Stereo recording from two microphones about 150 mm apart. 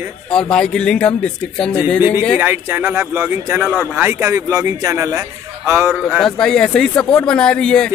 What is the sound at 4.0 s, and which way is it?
A man's voice, 15° right (ahead or behind).